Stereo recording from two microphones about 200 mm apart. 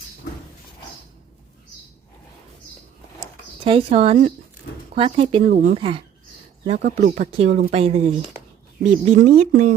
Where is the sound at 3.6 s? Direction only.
30° right (ahead or behind).